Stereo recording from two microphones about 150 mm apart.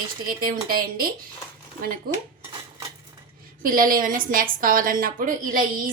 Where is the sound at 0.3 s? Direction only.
75° right (ahead or behind).